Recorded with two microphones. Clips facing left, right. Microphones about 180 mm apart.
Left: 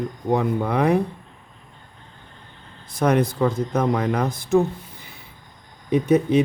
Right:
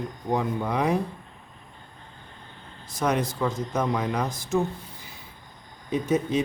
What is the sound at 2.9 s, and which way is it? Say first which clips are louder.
Speech: left 6 dB; 55° left (ahead or behind).